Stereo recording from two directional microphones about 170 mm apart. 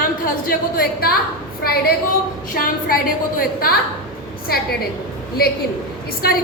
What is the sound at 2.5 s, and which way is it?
Speech, 60° left (ahead or behind).